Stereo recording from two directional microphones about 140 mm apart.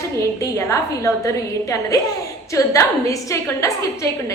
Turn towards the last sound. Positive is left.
turn(degrees=20)  # may be behind; listen again after turning